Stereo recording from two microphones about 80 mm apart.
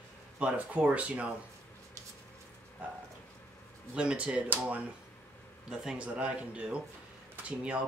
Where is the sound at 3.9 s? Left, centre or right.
Centre.